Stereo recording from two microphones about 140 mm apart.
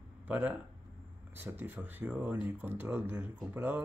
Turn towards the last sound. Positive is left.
turn(degrees=-15)  # may be behind; listen again after turning